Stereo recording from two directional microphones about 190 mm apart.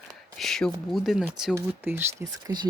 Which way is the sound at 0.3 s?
Centre (ahead or behind).